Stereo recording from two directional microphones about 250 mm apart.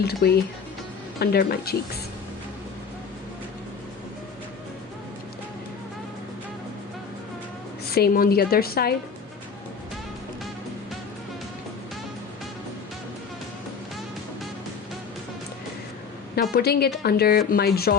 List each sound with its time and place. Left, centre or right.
0.0 s a woman's voice: left
7.9 s a woman's voice: left
16.3 s a woman's voice: left